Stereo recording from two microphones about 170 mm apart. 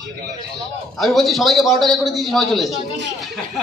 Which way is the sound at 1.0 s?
Centre (ahead or behind).